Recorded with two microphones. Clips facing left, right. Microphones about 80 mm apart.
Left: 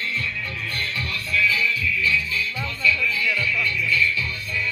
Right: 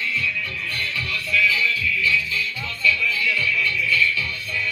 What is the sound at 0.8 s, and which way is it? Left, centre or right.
Music, left.